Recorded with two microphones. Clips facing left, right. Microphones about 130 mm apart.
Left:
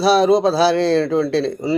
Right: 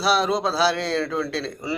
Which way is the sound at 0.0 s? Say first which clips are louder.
Left 8 dB; 35° left (ahead or behind).